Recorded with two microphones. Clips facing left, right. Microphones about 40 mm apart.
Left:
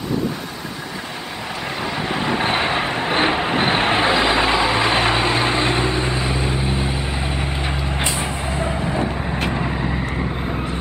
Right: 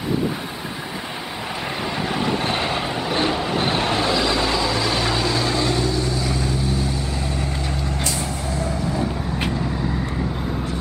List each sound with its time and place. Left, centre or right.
2.1 s vehicle: centre
8.5 s vehicle: left